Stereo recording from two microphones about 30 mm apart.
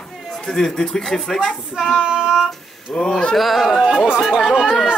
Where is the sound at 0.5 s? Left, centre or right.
Centre.